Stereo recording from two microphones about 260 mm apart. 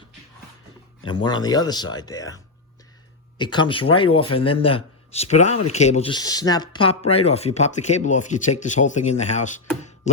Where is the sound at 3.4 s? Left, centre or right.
Centre.